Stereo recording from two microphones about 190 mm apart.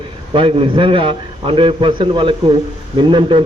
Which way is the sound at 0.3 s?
25° right (ahead or behind).